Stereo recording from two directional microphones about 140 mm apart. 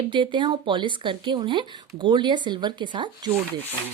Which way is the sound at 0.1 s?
35° right (ahead or behind).